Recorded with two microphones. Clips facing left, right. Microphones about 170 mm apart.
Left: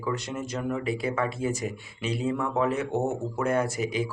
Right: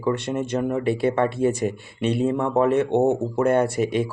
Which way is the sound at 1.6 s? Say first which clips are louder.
Right 8 dB; 60° right (ahead or behind).